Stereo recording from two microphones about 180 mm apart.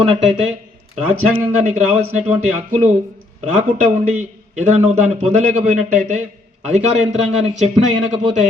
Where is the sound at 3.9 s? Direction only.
40° right (ahead or behind).